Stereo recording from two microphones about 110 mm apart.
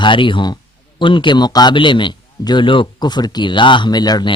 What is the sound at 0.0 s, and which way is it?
A man's voice, 50° left (ahead or behind).